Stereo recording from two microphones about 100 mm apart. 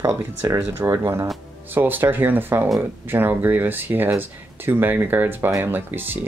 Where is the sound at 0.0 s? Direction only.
25° right (ahead or behind).